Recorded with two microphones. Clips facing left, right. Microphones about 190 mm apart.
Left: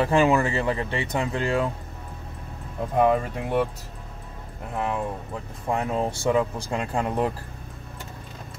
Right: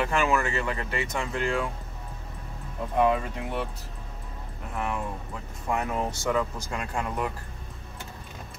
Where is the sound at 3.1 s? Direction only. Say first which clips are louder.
Left 4 dB; 45° left (ahead or behind).